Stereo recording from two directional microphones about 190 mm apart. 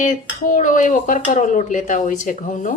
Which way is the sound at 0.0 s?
40° left (ahead or behind).